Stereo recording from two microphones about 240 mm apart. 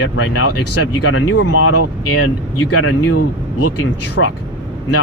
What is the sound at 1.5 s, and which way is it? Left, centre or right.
Speech, left.